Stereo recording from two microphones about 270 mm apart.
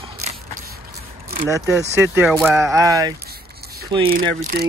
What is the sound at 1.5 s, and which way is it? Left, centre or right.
Speech, centre.